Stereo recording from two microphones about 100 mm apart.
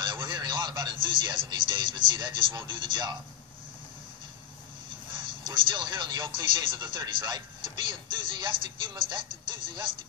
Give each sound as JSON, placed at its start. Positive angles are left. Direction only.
{"t": 0.0, "sound": "speech", "side_deg": -50}
{"t": 5.5, "sound": "speech", "side_deg": -50}